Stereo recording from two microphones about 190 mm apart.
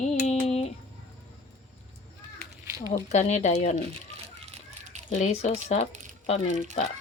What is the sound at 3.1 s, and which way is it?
Speech, 35° left (ahead or behind).